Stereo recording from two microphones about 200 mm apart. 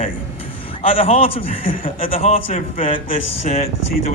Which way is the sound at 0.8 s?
30° left (ahead or behind).